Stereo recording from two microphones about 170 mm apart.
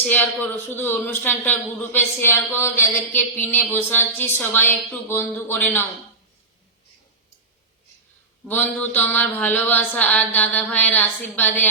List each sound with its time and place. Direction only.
0.0 s a man's voice: 10° left (ahead or behind)
8.4 s a man's voice: 10° left (ahead or behind)